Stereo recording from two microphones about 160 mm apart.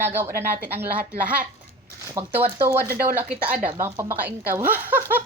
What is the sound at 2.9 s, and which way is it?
Speech, 65° right (ahead or behind).